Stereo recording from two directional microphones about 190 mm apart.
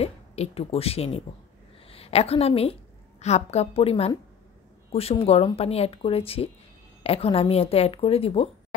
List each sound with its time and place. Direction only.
0.0 s a woman's voice: 35° left (ahead or behind)
5.2 s speech: 30° left (ahead or behind)